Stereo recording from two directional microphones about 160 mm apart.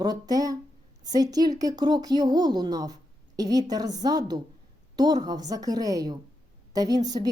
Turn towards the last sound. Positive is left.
turn(degrees=-25)  # may be behind; listen again after turning